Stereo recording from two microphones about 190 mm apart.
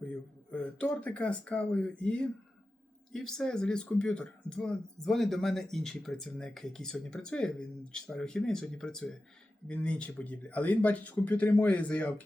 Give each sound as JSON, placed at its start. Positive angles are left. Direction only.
{"t": 0.5, "sound": "speech", "side_deg": 5}